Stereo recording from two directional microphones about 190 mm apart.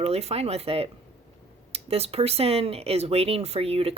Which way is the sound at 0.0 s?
35° right (ahead or behind).